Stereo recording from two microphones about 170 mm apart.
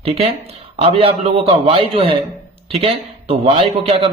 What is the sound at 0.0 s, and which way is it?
A man's voice, 35° right (ahead or behind).